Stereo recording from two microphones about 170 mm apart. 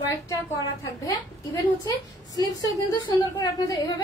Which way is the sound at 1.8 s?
20° left (ahead or behind).